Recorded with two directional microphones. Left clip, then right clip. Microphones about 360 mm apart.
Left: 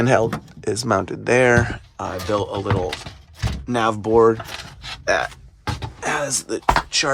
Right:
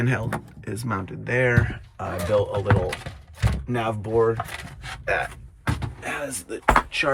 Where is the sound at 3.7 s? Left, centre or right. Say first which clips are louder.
Left 7 dB; centre.